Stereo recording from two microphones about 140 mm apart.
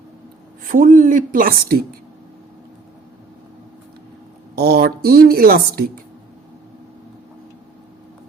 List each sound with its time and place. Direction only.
0.6 s speech: 75° right (ahead or behind); by 1.8 s 90° right
4.6 s speech: 90° right